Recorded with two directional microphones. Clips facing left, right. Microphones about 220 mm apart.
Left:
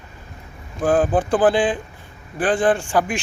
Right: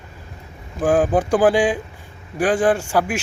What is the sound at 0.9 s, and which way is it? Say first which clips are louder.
Speech: right 1 dB; 10° right (ahead or behind).